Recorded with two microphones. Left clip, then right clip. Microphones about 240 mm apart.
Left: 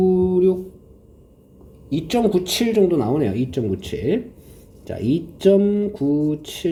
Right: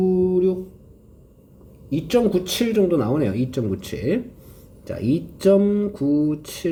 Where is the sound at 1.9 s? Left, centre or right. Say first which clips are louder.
Even; centre.